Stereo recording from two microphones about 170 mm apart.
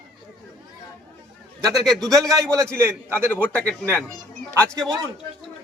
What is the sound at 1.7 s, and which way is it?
Speech, centre (ahead or behind).